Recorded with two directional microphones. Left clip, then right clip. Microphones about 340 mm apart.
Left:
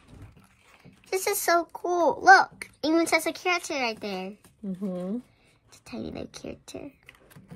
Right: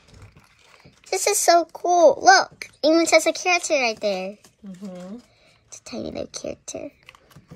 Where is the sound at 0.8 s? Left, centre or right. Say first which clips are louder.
Right 5 dB; centre.